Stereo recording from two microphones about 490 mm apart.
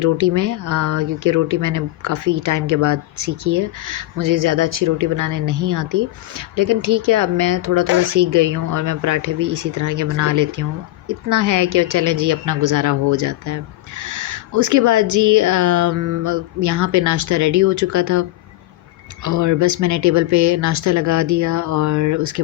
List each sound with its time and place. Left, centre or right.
0.0 s speech: right